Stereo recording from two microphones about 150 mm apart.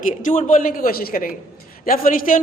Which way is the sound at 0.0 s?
55° left (ahead or behind).